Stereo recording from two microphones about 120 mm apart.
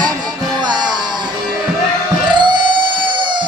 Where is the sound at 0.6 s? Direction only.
35° right (ahead or behind).